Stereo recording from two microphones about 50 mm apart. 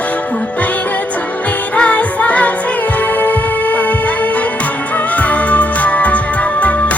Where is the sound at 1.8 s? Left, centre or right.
Left.